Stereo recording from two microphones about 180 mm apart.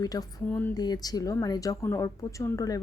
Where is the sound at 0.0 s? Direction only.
20° left (ahead or behind).